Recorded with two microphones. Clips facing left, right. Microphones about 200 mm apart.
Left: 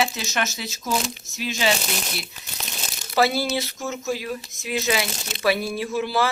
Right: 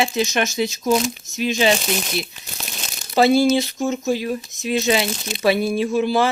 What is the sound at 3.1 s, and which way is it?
Speech, 25° right (ahead or behind).